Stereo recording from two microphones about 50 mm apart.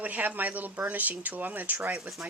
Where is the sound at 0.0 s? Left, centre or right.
Right.